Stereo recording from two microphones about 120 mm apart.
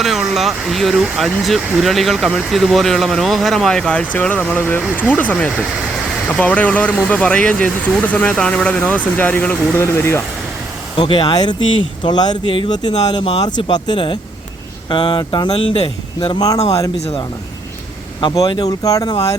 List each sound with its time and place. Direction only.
0.0 s speech: centre (ahead or behind); by 10.2 s 20° left (ahead or behind)
10.9 s speech: 40° left (ahead or behind)
13.2 s speech: 55° left (ahead or behind)
13.7 s speech: 35° left (ahead or behind)
18.2 s speech: 35° left (ahead or behind)